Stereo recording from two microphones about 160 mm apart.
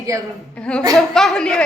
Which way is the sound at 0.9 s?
Centre (ahead or behind).